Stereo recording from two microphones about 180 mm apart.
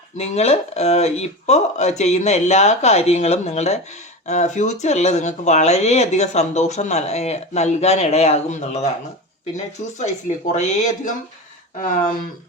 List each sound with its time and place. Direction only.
0.2 s speech: 35° left (ahead or behind)